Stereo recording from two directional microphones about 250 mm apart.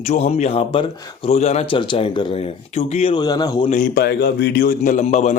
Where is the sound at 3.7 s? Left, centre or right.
Left.